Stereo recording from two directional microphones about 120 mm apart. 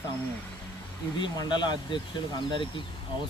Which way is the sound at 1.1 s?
35° left (ahead or behind).